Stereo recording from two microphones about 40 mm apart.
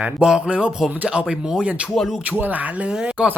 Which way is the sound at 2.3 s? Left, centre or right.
Right.